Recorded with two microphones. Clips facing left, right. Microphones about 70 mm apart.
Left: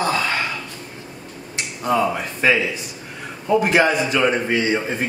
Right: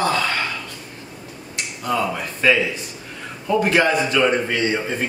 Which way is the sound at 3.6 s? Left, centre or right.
Centre.